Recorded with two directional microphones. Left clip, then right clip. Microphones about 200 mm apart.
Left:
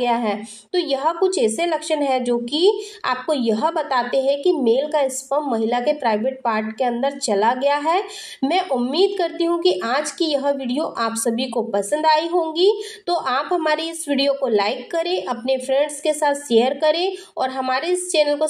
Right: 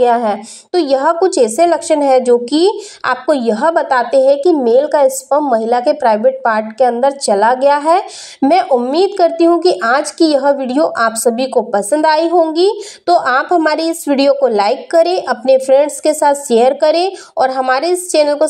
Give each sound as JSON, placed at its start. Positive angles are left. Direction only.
{"t": 0.0, "sound": "a woman's voice", "side_deg": -40}